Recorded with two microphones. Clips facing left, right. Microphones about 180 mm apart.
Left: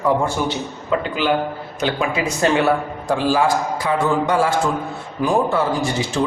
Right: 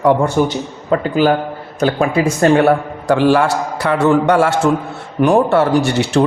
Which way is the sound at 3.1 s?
70° right (ahead or behind).